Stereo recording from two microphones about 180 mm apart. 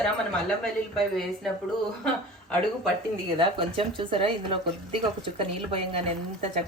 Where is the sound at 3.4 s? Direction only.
30° right (ahead or behind).